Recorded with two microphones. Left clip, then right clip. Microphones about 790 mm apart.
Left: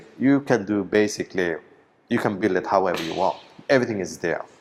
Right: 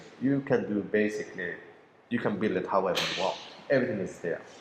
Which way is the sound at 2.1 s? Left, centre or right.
Left.